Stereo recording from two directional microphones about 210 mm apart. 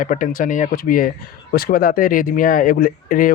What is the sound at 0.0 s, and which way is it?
Speech, 40° left (ahead or behind).